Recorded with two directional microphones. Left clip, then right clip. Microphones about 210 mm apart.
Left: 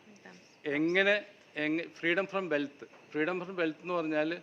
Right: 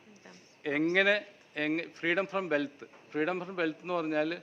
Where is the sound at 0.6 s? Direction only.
15° right (ahead or behind).